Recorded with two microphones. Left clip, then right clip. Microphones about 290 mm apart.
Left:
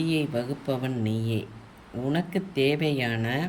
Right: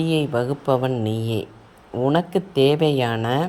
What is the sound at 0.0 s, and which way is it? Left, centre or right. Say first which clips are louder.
Speech: right 6 dB; centre.